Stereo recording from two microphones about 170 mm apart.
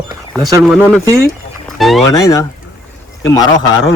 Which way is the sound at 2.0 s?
20° left (ahead or behind).